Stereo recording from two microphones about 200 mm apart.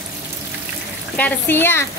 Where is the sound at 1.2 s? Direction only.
10° left (ahead or behind).